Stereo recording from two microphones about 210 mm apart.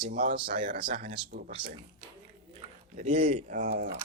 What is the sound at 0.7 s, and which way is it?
Speech, 40° right (ahead or behind).